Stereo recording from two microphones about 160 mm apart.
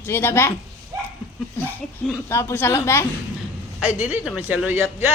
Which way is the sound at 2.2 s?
15° left (ahead or behind).